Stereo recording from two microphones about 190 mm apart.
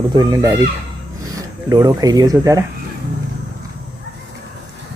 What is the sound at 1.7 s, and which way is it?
Speech, 20° right (ahead or behind).